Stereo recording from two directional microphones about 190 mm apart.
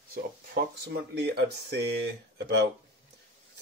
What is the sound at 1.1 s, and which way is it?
Speech, 60° right (ahead or behind).